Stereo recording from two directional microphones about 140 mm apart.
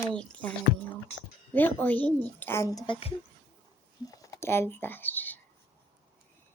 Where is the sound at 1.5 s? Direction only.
15° left (ahead or behind).